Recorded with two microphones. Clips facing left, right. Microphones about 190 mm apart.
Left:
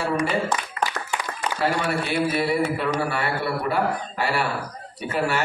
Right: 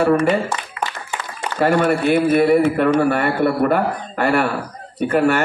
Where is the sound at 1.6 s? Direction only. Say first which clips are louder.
Right 9 dB; 50° right (ahead or behind).